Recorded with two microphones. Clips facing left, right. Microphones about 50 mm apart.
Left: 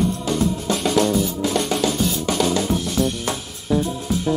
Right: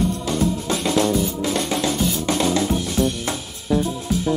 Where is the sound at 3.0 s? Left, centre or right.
Centre.